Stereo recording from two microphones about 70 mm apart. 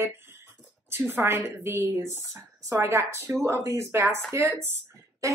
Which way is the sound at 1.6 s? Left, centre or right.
Right.